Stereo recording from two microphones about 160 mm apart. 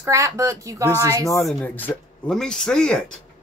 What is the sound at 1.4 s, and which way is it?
Speech, 5° left (ahead or behind).